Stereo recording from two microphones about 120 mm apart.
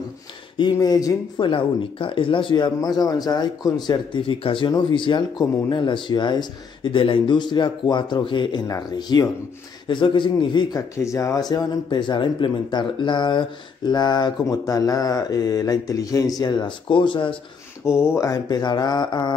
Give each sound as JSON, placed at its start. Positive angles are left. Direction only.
{"t": 0.6, "sound": "speech", "side_deg": 35}
{"t": 1.5, "sound": "speech", "side_deg": 45}
{"t": 8.6, "sound": "speech", "side_deg": 30}
{"t": 11.0, "sound": "speech", "side_deg": 25}
{"t": 17.8, "sound": "speech", "side_deg": 20}